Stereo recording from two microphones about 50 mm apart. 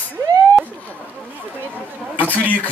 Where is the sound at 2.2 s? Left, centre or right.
Left.